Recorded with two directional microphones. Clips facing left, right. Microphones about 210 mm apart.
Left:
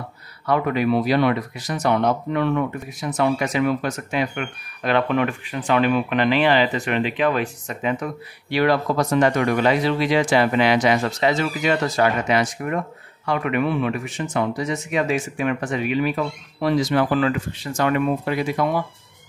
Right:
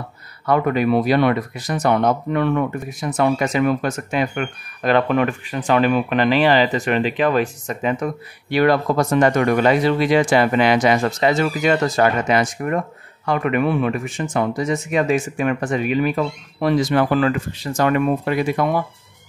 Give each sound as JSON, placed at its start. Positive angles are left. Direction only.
{"t": 0.5, "sound": "speech", "side_deg": -50}